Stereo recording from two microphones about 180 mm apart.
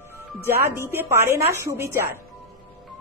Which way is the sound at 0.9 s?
15° right (ahead or behind).